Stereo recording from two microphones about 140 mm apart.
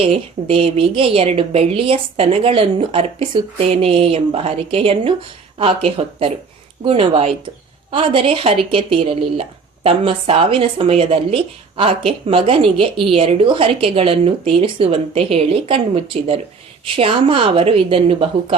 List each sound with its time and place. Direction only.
0.0 s a woman's voice: 40° right (ahead or behind)